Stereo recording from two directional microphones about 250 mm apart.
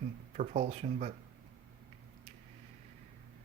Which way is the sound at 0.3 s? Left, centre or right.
Right.